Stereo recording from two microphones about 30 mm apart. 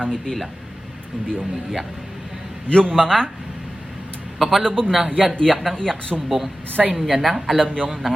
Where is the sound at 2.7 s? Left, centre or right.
Left.